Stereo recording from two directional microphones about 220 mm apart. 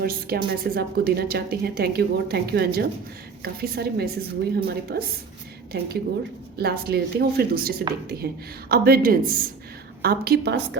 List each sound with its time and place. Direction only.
0.0 s a woman's voice: 45° right (ahead or behind)